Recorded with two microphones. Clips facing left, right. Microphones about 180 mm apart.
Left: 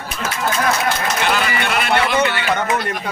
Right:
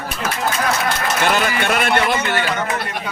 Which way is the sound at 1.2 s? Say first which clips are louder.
Right 3 dB; 50° right (ahead or behind).